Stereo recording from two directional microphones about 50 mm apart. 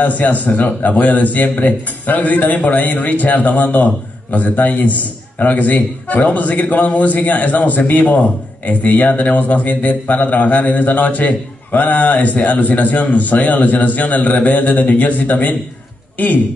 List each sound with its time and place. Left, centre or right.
0.0 s a man's voice: left